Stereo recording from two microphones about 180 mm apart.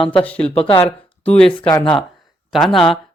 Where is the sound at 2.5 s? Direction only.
Centre (ahead or behind).